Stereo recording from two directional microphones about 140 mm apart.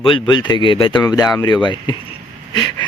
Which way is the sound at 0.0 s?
35° left (ahead or behind).